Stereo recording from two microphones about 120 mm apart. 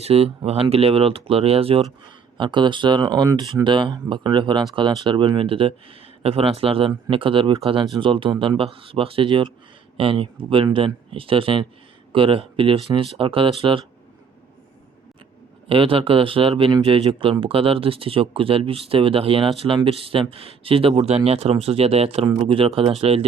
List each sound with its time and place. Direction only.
0.0 s speech: 55° right (ahead or behind)
2.4 s speech: 40° right (ahead or behind)
15.7 s speech: 50° right (ahead or behind)